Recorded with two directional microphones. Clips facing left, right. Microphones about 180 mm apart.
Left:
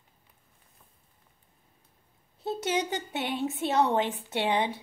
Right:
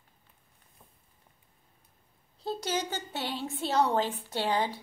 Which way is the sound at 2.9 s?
20° left (ahead or behind).